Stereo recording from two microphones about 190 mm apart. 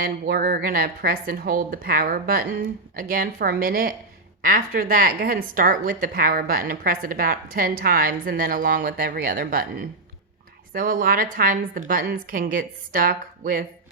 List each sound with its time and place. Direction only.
0.0 s a woman's voice: 50° right (ahead or behind)